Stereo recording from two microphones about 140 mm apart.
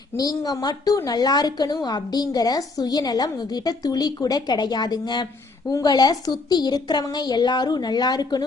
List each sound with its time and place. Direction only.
0.2 s a woman's voice: 25° left (ahead or behind)